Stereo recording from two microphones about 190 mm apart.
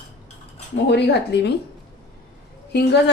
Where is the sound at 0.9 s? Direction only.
65° left (ahead or behind).